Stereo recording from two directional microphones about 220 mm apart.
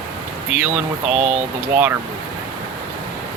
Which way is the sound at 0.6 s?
5° right (ahead or behind).